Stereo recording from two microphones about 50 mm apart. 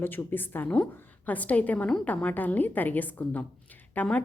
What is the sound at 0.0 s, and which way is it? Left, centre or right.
A woman's voice, left.